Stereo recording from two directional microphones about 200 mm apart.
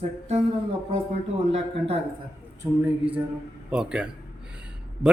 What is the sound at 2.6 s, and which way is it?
A man's voice, 10° right (ahead or behind).